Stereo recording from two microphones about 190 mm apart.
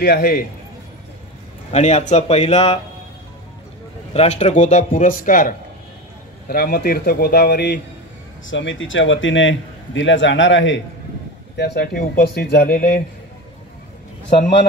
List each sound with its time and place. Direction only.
0.0 s a man's voice: 55° left (ahead or behind)
1.7 s speech: 35° left (ahead or behind)
4.1 s a man's voice: 35° left (ahead or behind); by 7.8 s 60° left (ahead or behind)
8.5 s a man's voice: 85° left
11.5 s speech: 60° left (ahead or behind)